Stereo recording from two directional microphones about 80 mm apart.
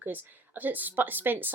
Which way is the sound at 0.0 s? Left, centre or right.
Right.